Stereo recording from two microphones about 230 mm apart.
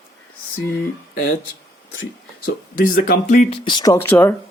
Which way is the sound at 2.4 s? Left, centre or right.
Left.